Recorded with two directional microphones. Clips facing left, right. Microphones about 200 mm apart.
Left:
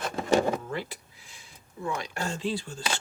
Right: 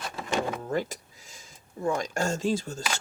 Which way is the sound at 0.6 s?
40° right (ahead or behind).